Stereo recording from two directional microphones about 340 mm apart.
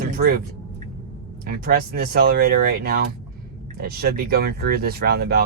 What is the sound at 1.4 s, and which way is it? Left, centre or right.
Speech, right.